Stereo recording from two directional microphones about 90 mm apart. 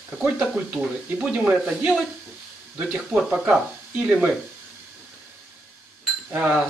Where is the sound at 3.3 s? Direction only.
15° right (ahead or behind).